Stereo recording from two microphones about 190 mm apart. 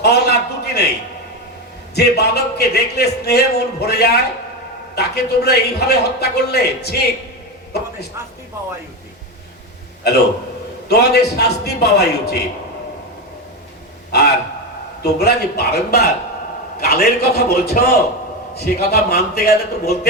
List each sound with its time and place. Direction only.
0.0 s a sound: 60° left (ahead or behind)
2.0 s a man's voice: 60° left (ahead or behind)
10.8 s a man's voice: 60° left (ahead or behind)
14.1 s a man's voice: 60° left (ahead or behind)